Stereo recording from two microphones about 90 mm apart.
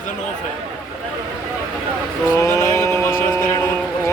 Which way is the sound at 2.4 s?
30° left (ahead or behind).